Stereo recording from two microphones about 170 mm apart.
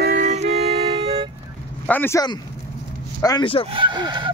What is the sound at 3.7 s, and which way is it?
Speech, 30° right (ahead or behind).